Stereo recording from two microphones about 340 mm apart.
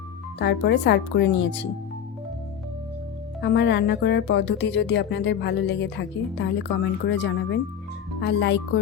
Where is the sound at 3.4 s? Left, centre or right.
Left.